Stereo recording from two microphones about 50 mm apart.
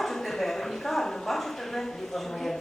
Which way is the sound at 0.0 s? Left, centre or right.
Centre.